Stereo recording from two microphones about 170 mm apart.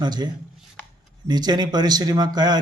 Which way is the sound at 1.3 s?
25° right (ahead or behind).